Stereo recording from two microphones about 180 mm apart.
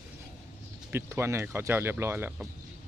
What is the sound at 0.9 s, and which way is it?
Speech, 15° right (ahead or behind).